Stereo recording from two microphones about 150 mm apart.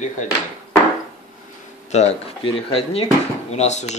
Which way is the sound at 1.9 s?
45° left (ahead or behind).